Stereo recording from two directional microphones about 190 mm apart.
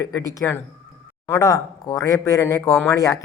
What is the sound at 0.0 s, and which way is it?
Speech, 20° left (ahead or behind).